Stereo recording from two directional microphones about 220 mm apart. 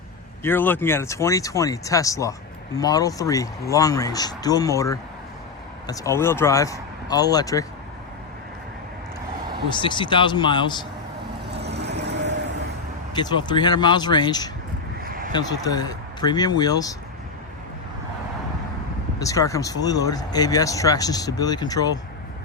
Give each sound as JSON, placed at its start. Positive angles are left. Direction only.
{"t": 0.4, "sound": "speech", "side_deg": 10}
{"t": 9.8, "sound": "speech", "side_deg": 20}
{"t": 11.4, "sound": "vehicle", "side_deg": -50}
{"t": 13.1, "sound": "speech", "side_deg": 20}
{"t": 15.0, "sound": "a sound", "side_deg": -40}
{"t": 15.3, "sound": "speech", "side_deg": 20}
{"t": 19.2, "sound": "speech", "side_deg": 15}